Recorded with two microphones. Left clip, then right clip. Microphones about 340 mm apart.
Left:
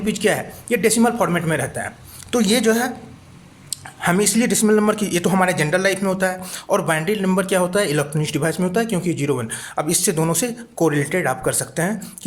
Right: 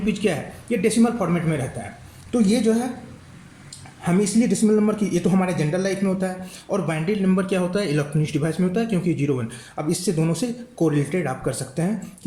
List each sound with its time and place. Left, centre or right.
0.0 s a man's voice: centre